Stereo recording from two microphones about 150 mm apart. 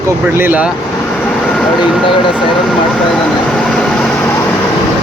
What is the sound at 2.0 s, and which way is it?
Speech, 35° left (ahead or behind).